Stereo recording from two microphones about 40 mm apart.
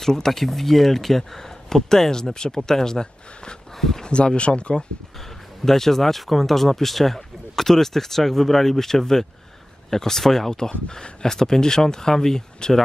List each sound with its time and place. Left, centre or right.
0.0 s speech: centre; by 4.8 s left
5.7 s speech: centre